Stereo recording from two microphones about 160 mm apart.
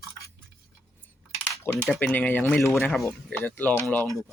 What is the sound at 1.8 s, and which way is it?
Speech, 5° left (ahead or behind).